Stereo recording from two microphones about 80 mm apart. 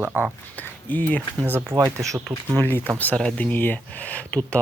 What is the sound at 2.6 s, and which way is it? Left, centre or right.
Speech, left.